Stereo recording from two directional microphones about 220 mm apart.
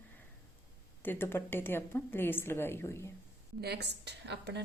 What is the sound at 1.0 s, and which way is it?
A woman's voice, 10° left (ahead or behind).